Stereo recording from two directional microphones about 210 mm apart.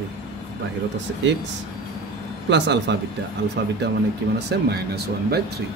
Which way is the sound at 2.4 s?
55° right (ahead or behind).